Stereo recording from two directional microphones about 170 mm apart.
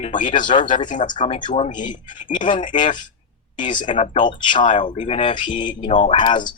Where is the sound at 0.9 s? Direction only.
45° left (ahead or behind).